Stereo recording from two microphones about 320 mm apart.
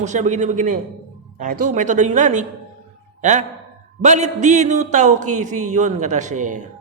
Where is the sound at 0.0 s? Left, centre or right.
Right.